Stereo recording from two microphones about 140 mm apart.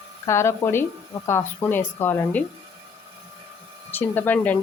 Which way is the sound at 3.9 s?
15° left (ahead or behind).